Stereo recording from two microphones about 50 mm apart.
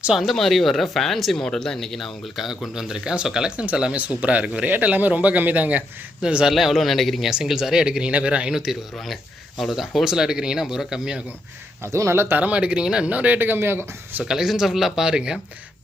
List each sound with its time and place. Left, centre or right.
0.1 s speech: centre; by 5.8 s right
6.4 s speech: centre
7.3 s speech: centre
8.5 s speech: centre
11.8 s speech: right
12.4 s speech: right
13.1 s speech: right
13.5 s speech: right
14.3 s speech: centre